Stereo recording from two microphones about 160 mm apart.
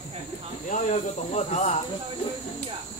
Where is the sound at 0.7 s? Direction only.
50° left (ahead or behind).